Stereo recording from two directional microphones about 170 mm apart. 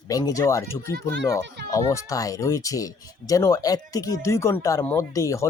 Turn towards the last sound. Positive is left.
turn(degrees=20)  # may be behind; listen again after turning